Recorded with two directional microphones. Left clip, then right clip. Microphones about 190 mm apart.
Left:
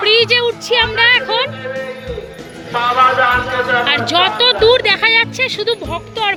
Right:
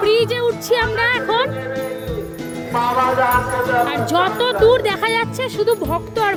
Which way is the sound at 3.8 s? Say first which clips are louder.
Left 4 dB; 15° right (ahead or behind).